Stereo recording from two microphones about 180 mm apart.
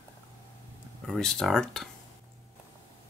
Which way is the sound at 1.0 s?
5° left (ahead or behind).